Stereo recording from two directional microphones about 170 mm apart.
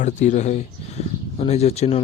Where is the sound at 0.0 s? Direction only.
45° left (ahead or behind).